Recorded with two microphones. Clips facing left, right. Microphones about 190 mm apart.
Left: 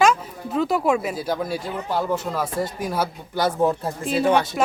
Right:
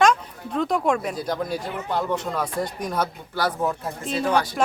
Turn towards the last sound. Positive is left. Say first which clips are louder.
# left 3 dB
turn(degrees=25)  # may be behind; listen again after turning